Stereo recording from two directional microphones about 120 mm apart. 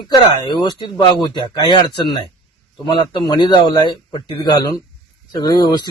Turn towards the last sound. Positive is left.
turn(degrees=35)  # may be behind; listen again after turning